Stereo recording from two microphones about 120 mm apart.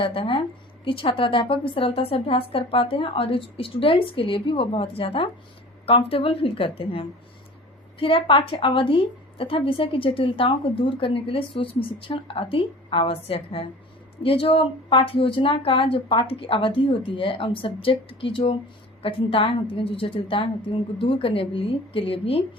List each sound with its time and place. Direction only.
0.0 s a woman's voice: 50° left (ahead or behind)